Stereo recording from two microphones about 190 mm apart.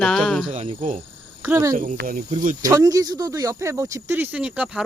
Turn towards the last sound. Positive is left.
turn(degrees=-15)  # may be behind; listen again after turning